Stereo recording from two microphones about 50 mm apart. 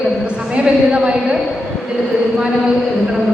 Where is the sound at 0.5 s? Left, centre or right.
Right.